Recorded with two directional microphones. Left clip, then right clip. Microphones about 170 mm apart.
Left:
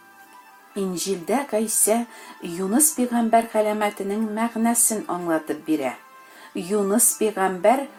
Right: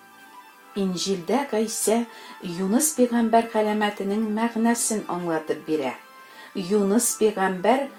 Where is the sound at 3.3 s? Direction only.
40° left (ahead or behind).